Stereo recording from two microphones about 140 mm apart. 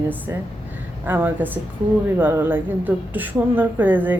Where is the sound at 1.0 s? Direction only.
10° right (ahead or behind).